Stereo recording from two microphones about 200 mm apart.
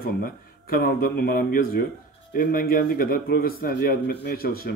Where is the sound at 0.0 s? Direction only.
45° left (ahead or behind).